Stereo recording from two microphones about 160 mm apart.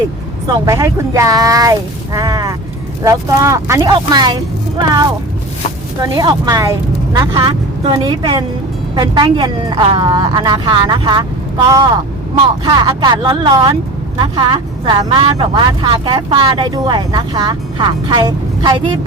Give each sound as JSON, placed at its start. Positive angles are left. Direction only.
{"t": 0.4, "sound": "speech", "side_deg": -20}
{"t": 6.0, "sound": "speech", "side_deg": -25}